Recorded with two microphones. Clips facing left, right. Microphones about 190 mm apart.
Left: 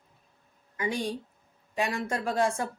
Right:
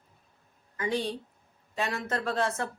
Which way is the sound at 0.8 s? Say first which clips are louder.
Even; 10° left (ahead or behind).